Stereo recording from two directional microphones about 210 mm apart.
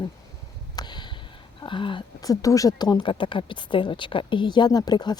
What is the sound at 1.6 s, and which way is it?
Speech, 25° left (ahead or behind).